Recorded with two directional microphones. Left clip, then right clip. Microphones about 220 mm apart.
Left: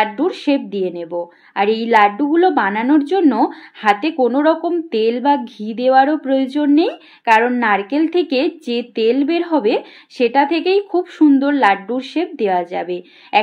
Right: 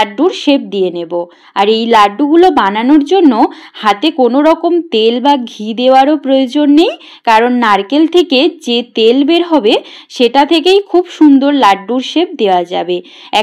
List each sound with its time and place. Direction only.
0.0 s a woman's voice: 20° right (ahead or behind)